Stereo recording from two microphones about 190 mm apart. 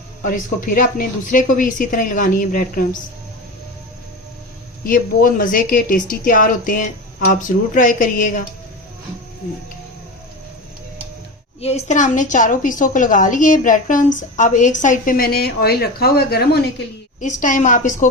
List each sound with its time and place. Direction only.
0.2 s speech: 45° left (ahead or behind)
4.8 s speech: 45° left (ahead or behind)
11.6 s speech: 35° left (ahead or behind); by 16.6 s 55° left (ahead or behind)
17.2 s speech: 40° left (ahead or behind)